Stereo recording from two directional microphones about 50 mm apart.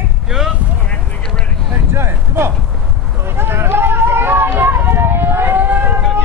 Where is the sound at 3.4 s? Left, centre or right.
Right.